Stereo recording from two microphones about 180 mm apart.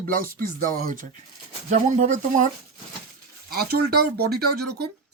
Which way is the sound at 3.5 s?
60° right (ahead or behind).